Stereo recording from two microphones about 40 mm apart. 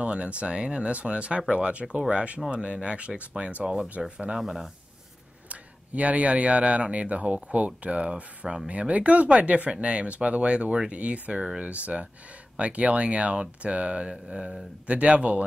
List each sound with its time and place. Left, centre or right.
0.0 s speech: right
3.6 s speech: centre
5.5 s speech: right